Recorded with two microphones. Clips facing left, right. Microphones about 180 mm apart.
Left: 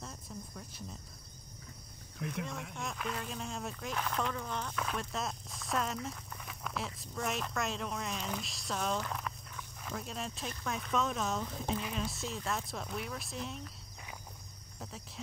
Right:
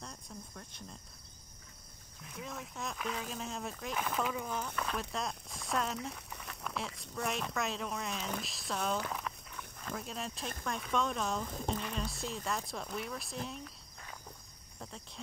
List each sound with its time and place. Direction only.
0.0 s cricket: 5° left (ahead or behind)
2.2 s speech: 75° left (ahead or behind)
2.7 s speech: centre (ahead or behind)